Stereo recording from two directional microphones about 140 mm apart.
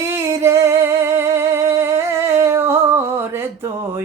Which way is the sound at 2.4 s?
20° right (ahead or behind).